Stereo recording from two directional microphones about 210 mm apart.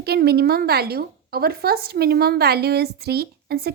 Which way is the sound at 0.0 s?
50° right (ahead or behind).